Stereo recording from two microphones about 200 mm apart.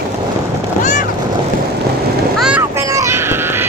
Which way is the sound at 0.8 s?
40° left (ahead or behind).